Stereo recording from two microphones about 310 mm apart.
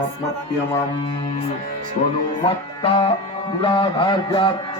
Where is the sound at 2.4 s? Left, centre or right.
Centre.